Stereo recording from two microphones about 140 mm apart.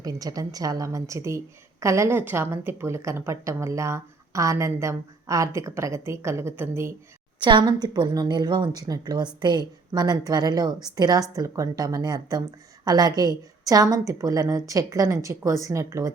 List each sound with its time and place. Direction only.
0.0 s a woman's voice: 25° right (ahead or behind)
7.3 s a woman's voice: 35° right (ahead or behind)